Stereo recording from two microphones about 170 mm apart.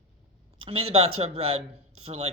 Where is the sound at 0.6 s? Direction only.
35° right (ahead or behind).